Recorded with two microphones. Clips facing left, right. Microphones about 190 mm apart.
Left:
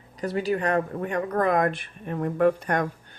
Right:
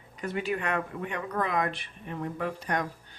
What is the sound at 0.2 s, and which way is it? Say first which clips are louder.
Speech: left 6 dB; 35° left (ahead or behind).